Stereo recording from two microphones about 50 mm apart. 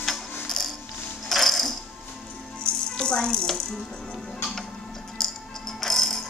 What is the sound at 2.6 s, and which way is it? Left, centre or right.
Rattle, centre.